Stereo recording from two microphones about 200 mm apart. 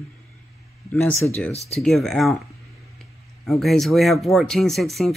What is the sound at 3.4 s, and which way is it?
Speech, centre (ahead or behind).